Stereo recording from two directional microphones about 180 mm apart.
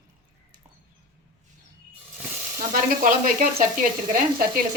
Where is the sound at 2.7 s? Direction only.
55° right (ahead or behind).